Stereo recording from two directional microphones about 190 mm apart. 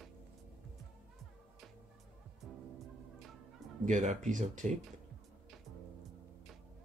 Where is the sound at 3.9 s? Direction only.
40° right (ahead or behind).